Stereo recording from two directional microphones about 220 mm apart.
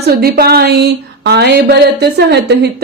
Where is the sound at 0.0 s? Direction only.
45° right (ahead or behind).